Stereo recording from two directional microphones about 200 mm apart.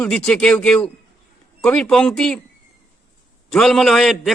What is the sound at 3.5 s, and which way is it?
Speech, centre (ahead or behind).